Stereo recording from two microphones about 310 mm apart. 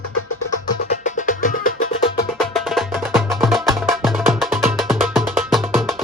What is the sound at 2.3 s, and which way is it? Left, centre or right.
Music, centre.